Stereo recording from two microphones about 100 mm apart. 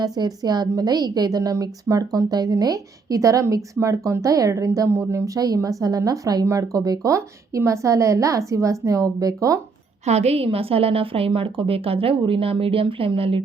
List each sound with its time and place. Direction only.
0.0 s a woman's voice: 40° right (ahead or behind)
10.1 s a woman's voice: 90° right; by 13.4 s 65° right (ahead or behind)